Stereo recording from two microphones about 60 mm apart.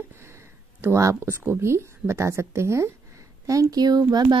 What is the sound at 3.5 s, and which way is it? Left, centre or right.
Speech, right.